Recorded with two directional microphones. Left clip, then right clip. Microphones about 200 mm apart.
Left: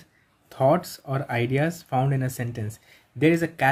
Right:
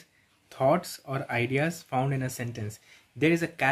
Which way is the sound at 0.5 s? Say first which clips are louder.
Left 4 dB; 10° left (ahead or behind).